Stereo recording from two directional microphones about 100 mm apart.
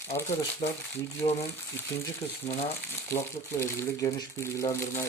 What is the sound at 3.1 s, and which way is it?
Speech, 25° left (ahead or behind).